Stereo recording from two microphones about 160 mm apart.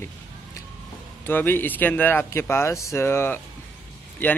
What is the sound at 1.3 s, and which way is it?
Speech, 10° left (ahead or behind).